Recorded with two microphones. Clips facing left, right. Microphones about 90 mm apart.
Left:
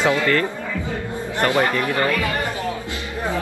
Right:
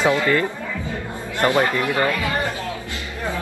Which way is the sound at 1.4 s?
20° right (ahead or behind).